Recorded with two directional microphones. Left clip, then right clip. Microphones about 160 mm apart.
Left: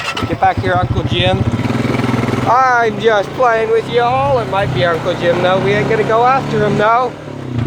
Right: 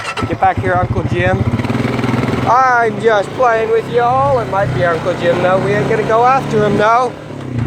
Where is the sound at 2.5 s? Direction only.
35° left (ahead or behind).